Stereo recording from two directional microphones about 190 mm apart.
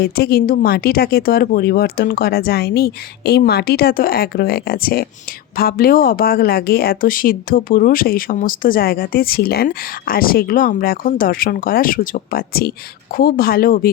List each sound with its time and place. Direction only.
0.0 s speech: 55° left (ahead or behind)